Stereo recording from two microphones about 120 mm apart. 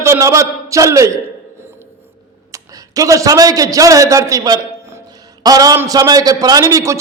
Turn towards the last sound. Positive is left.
turn(degrees=-25)  # may be behind; listen again after turning